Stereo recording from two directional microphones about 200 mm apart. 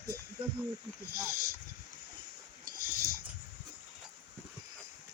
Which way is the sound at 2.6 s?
45° right (ahead or behind).